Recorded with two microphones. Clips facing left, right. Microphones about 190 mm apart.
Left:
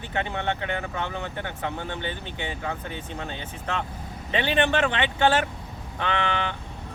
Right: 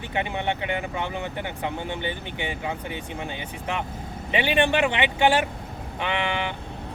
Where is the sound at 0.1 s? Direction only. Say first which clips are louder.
Right 1 dB; 15° right (ahead or behind).